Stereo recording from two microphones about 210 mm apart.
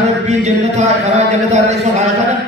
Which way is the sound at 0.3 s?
35° right (ahead or behind).